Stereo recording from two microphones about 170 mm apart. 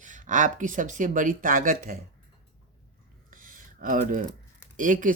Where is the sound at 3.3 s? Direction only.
55° right (ahead or behind).